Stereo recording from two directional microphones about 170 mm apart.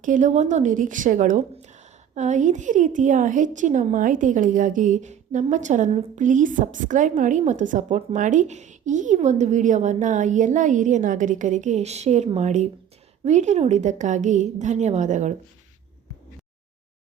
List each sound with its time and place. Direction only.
0.0 s a woman's voice: 50° right (ahead or behind)